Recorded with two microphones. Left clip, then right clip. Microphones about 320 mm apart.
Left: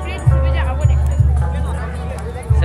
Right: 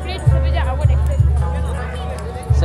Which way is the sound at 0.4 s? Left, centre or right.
Right.